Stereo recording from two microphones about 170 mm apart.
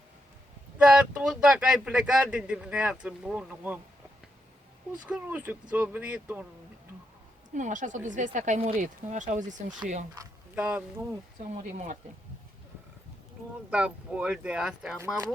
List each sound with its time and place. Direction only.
0.8 s speech: 5° right (ahead or behind)
5.0 s speech: 10° right (ahead or behind)
7.5 s speech: 50° right (ahead or behind)
10.5 s speech: 10° right (ahead or behind)
13.7 s speech: 5° right (ahead or behind)
14.9 s speech: 15° right (ahead or behind)